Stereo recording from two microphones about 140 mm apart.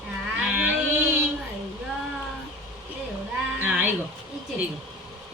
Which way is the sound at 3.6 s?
10° right (ahead or behind).